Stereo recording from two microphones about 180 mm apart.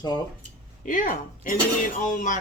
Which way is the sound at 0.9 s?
50° left (ahead or behind).